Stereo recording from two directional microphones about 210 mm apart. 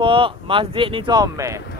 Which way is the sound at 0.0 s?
25° right (ahead or behind).